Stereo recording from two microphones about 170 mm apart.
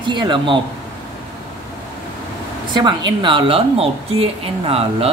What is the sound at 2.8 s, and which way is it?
A woman's voice, 25° right (ahead or behind).